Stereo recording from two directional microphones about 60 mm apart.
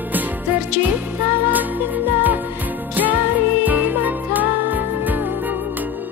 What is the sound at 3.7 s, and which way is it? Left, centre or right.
Music, right.